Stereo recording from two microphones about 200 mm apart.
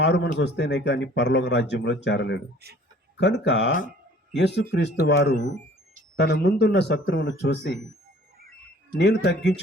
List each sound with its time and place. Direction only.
0.0 s speech: 60° left (ahead or behind)
2.6 s a man's voice: 55° right (ahead or behind)
3.2 s speech: 60° left (ahead or behind)
8.9 s speech: 60° left (ahead or behind)